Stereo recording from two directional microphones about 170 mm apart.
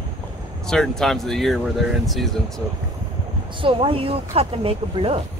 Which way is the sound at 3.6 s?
30° right (ahead or behind).